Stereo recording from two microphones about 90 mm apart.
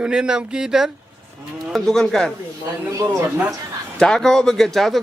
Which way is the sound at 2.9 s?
35° right (ahead or behind).